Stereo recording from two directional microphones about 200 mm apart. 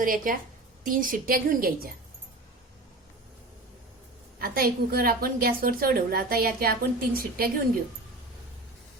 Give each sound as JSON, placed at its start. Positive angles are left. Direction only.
{"t": 0.0, "sound": "a woman's voice", "side_deg": -45}
{"t": 4.4, "sound": "a woman's voice", "side_deg": -50}